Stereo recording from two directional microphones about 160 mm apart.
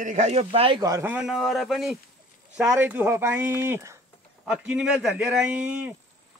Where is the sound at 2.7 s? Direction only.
10° right (ahead or behind).